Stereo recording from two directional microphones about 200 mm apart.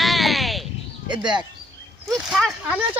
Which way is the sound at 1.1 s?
20° right (ahead or behind).